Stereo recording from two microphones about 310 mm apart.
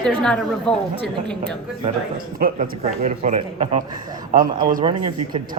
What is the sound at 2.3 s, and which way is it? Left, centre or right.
A man's voice, right.